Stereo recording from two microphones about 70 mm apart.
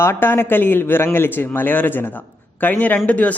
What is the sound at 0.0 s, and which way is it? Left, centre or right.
A man's voice, left.